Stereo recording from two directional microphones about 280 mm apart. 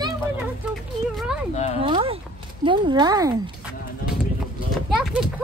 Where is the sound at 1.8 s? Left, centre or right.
Centre.